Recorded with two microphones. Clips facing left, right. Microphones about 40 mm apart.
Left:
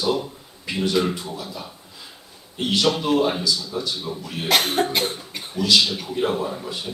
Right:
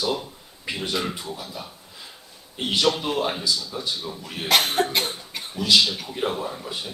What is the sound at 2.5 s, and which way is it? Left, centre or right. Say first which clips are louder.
A man's voice: left 1 dB; centre.